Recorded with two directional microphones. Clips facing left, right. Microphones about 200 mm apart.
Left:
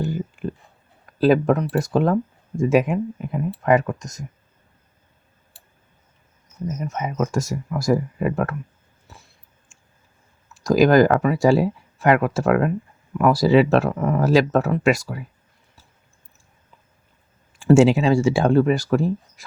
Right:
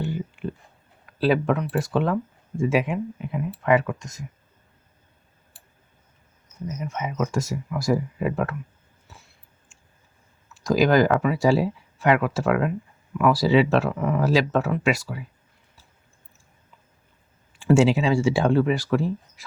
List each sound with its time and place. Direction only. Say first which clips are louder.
0.0 s a sound: left 3 dB; 45° left (ahead or behind)
1.0 s speech: left 5 dB; 45° left (ahead or behind)
6.7 s speech: left 3 dB; 45° left (ahead or behind)
10.5 s speech: left 4 dB; 45° left (ahead or behind)
17.6 s speech: left 4 dB; 45° left (ahead or behind)